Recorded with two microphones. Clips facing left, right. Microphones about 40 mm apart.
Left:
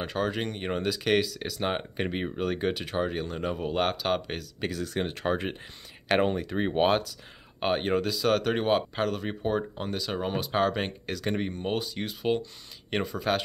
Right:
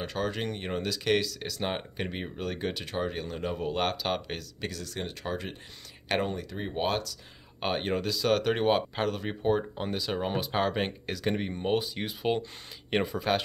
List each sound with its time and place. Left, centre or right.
0.0 s speech: centre
4.6 s speech: left
7.6 s speech: centre